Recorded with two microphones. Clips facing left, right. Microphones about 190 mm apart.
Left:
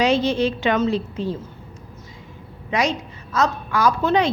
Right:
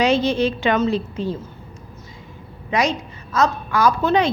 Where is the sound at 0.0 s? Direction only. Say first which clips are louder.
Right 1 dB; 55° right (ahead or behind).